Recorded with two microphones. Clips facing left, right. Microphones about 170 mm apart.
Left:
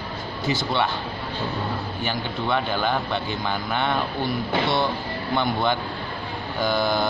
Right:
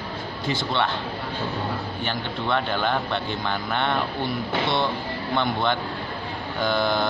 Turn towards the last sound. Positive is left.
turn(degrees=5)  # may be behind; listen again after turning